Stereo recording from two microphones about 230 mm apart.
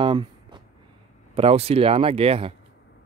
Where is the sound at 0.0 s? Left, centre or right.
Right.